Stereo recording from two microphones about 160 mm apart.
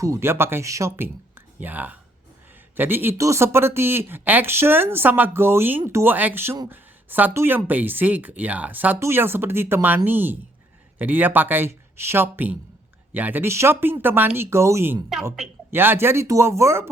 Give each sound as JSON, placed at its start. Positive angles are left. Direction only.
{"t": 0.0, "sound": "speech", "side_deg": -15}